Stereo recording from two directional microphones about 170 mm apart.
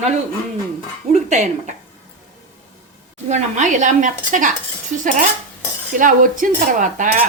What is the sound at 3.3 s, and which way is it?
Speech, 45° right (ahead or behind).